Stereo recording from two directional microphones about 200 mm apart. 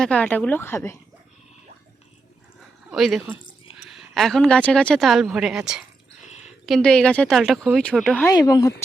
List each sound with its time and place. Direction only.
0.0 s speech: 5° left (ahead or behind)
2.9 s speech: centre (ahead or behind)
6.2 s a sound: 35° left (ahead or behind)
6.7 s speech: centre (ahead or behind)
8.3 s speech: 20° left (ahead or behind)